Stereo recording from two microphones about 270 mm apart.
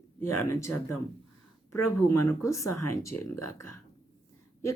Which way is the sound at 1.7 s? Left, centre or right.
Left.